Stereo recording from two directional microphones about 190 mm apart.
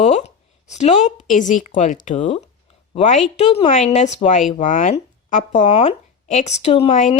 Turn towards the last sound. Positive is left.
turn(degrees=35)  # may be behind; listen again after turning